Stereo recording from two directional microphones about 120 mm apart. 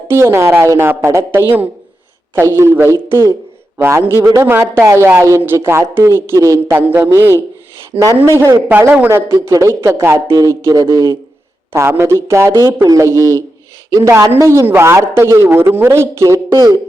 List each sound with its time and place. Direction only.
0.1 s a man's voice: 20° right (ahead or behind)
8.2 s a man's voice: 20° right (ahead or behind)